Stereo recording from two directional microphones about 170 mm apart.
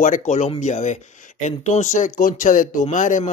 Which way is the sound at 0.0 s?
50° left (ahead or behind).